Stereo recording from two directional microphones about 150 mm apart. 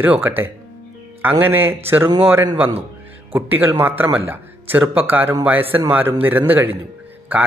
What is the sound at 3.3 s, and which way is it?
Speech, 15° right (ahead or behind).